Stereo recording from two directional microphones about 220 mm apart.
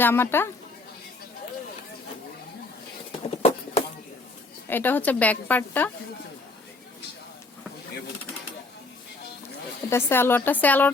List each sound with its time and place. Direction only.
0.0 s a woman's voice: 10° left (ahead or behind)
3.1 s a sound: 25° left (ahead or behind)
4.7 s a woman's voice: 10° left (ahead or behind)
9.9 s a woman's voice: 10° left (ahead or behind)